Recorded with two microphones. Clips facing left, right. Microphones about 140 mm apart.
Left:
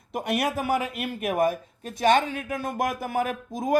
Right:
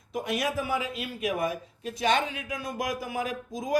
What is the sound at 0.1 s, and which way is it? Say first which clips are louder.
Speech: left 3 dB; 60° left (ahead or behind).